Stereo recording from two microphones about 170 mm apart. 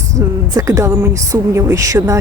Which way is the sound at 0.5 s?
20° right (ahead or behind).